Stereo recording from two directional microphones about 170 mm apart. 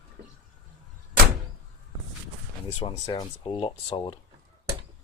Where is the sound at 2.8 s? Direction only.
25° left (ahead or behind).